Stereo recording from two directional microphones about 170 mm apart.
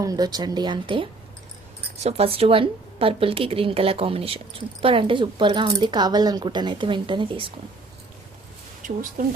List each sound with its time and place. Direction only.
0.0 s a woman's voice: 20° right (ahead or behind)